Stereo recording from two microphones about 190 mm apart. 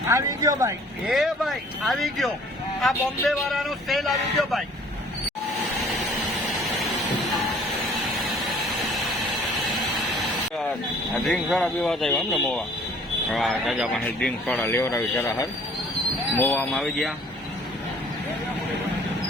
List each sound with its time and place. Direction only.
0.1 s speech: 20° right (ahead or behind)
1.0 s speech: centre (ahead or behind)
8.4 s a sound: centre (ahead or behind)
11.2 s speech: centre (ahead or behind)
16.4 s speech: 10° left (ahead or behind)